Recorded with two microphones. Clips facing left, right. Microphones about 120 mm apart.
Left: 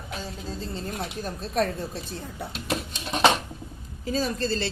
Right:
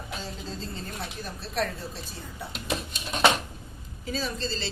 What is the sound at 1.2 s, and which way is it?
Speech, 45° left (ahead or behind).